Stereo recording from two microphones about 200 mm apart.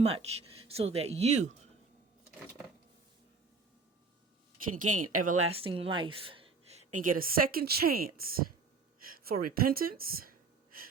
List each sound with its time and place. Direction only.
0.0 s speech: 30° right (ahead or behind)
4.7 s speech: 40° right (ahead or behind)
5.5 s speech: 30° right (ahead or behind)
7.2 s speech: 45° right (ahead or behind)